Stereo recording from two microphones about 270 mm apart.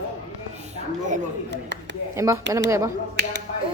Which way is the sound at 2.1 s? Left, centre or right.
Centre.